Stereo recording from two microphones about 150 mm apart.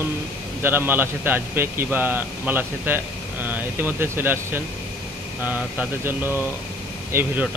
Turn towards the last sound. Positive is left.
turn(degrees=-10)  # may be behind; listen again after turning